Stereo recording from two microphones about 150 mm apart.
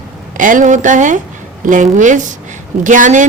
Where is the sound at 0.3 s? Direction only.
60° right (ahead or behind).